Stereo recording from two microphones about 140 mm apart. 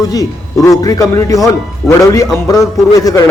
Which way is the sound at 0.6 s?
25° left (ahead or behind).